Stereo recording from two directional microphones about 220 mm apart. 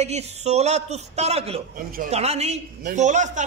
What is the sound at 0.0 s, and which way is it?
A man's voice, 30° right (ahead or behind).